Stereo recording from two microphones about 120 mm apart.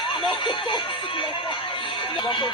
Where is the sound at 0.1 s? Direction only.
45° left (ahead or behind).